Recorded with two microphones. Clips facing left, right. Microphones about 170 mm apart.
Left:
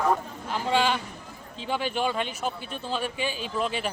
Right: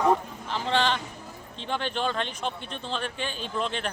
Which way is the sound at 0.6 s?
10° left (ahead or behind).